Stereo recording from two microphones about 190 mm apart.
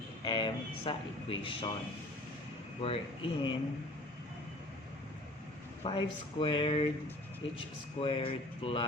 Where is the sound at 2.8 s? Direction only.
25° left (ahead or behind).